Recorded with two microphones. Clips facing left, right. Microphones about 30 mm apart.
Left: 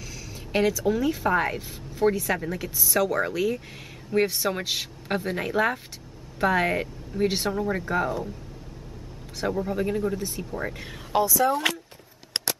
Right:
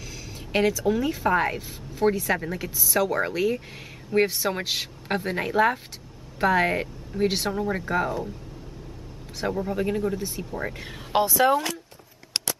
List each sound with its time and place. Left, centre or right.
0.5 s speech: centre
9.4 s speech: centre
11.1 s speech: right